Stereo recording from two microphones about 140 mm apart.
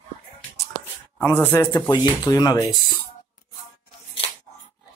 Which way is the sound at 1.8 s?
30° left (ahead or behind).